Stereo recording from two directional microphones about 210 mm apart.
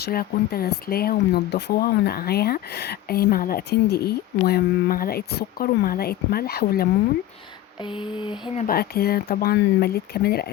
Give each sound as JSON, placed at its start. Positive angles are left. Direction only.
{"t": 0.0, "sound": "speech", "side_deg": 45}
{"t": 7.9, "sound": "speech", "side_deg": 20}
{"t": 8.6, "sound": "speech", "side_deg": 45}